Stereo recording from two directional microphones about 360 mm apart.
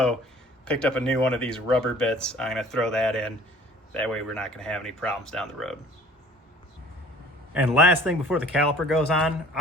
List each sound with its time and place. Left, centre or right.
0.6 s speech: centre
7.5 s speech: centre